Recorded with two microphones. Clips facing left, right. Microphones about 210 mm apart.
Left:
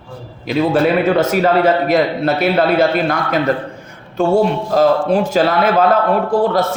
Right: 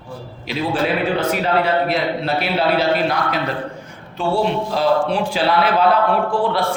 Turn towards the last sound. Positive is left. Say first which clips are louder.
# left 4 dB
turn(degrees=40)  # may be behind; listen again after turning